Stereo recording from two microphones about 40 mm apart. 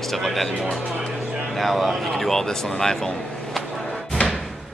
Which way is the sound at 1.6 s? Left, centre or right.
Centre.